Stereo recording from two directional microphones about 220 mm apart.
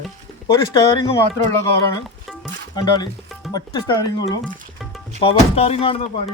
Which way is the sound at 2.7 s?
20° left (ahead or behind).